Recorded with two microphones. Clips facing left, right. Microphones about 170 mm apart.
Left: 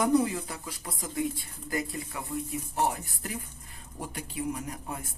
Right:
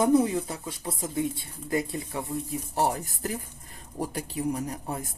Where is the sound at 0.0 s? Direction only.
25° right (ahead or behind).